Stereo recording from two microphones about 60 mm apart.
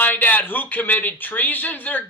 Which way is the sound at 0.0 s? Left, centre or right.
Left.